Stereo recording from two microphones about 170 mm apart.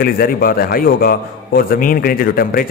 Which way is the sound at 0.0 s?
60° left (ahead or behind).